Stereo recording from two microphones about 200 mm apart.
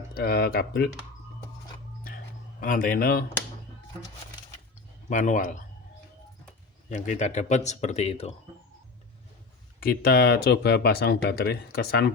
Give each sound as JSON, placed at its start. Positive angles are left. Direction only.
{"t": 0.1, "sound": "speech", "side_deg": 50}
{"t": 2.0, "sound": "a sound", "side_deg": 45}
{"t": 5.0, "sound": "speech", "side_deg": 40}
{"t": 6.9, "sound": "speech", "side_deg": 40}
{"t": 9.8, "sound": "speech", "side_deg": 50}